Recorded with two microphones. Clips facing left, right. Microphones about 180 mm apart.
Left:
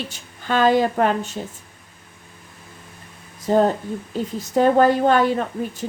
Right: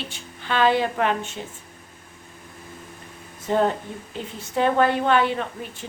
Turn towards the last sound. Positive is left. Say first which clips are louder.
# left 6 dB
turn(degrees=40)  # may be behind; listen again after turning